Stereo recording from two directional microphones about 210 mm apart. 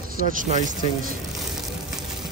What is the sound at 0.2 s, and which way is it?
Speech, 40° right (ahead or behind).